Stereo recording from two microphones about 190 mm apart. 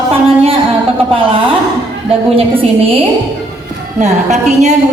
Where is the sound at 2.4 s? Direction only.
30° right (ahead or behind).